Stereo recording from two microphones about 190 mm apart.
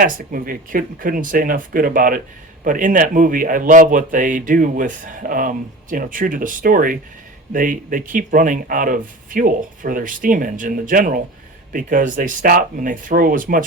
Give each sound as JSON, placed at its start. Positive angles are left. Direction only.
{"t": 0.0, "sound": "speech", "side_deg": -45}